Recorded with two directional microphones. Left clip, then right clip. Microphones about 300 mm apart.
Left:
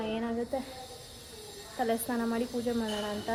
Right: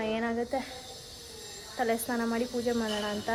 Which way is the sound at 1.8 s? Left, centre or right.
Centre.